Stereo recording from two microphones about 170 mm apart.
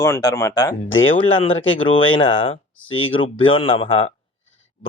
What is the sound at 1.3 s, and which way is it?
Speech, 30° left (ahead or behind).